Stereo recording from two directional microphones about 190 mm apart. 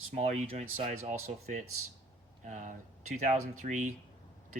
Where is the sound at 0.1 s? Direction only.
35° right (ahead or behind).